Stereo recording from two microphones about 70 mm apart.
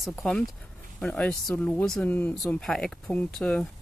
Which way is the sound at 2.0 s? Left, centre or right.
Left.